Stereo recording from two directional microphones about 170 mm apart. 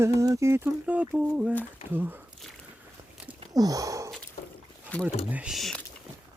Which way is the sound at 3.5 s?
20° right (ahead or behind).